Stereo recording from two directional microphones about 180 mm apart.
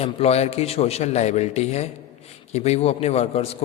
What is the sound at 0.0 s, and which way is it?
A man's voice, 35° left (ahead or behind).